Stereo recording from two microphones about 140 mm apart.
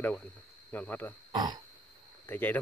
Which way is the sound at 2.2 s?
15° left (ahead or behind).